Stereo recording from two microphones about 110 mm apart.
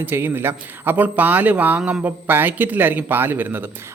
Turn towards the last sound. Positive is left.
turn(degrees=-20)  # may be behind; listen again after turning